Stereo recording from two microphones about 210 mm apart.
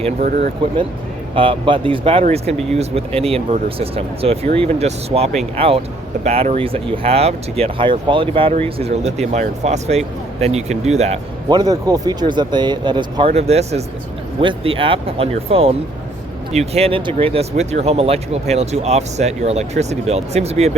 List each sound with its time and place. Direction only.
0.0 s speech: 40° right (ahead or behind)
0.6 s speech: 25° right (ahead or behind)
11.4 s speech: 20° right (ahead or behind)